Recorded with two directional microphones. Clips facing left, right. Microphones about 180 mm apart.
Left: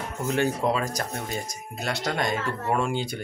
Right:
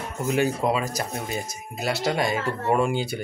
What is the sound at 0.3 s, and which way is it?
Speech, 10° right (ahead or behind).